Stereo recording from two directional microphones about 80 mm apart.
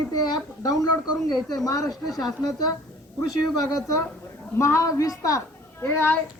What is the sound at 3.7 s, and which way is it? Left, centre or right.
A woman's voice, left.